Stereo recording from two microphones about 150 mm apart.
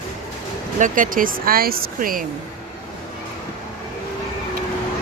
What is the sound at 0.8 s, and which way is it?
Speech, 60° right (ahead or behind).